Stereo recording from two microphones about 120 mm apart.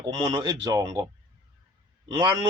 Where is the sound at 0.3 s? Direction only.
35° right (ahead or behind).